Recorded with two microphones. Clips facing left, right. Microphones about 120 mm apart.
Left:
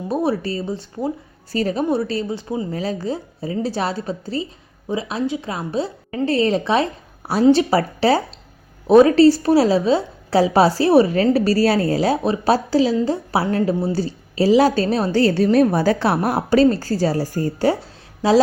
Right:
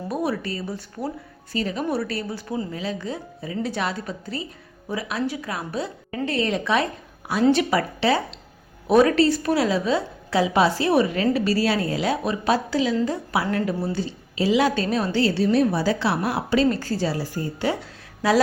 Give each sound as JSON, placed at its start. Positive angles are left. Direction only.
{"t": 0.1, "sound": "a woman's voice", "side_deg": 30}
{"t": 1.5, "sound": "a woman's voice", "side_deg": 40}
{"t": 1.8, "sound": "a woman's voice", "side_deg": 25}
{"t": 2.7, "sound": "a woman's voice", "side_deg": 40}
{"t": 13.9, "sound": "a woman's voice", "side_deg": 40}